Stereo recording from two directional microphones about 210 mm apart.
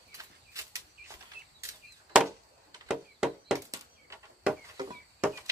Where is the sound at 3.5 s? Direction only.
15° right (ahead or behind).